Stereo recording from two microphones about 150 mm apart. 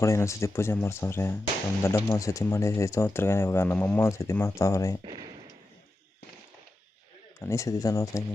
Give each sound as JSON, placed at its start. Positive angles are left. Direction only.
{"t": 0.0, "sound": "speech", "side_deg": 20}
{"t": 7.3, "sound": "speech", "side_deg": 20}